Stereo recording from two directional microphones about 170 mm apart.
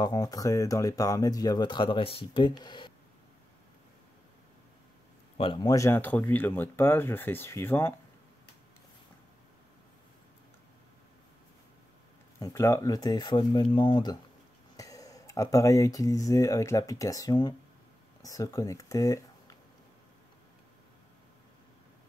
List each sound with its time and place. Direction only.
0.0 s speech: 20° left (ahead or behind)
5.4 s speech: 25° left (ahead or behind)
12.4 s speech: 20° left (ahead or behind)